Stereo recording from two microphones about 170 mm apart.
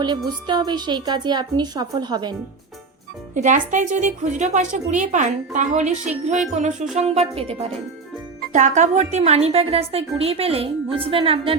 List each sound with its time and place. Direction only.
0.3 s a woman's voice: 25° right (ahead or behind)
3.3 s a woman's voice: 45° right (ahead or behind)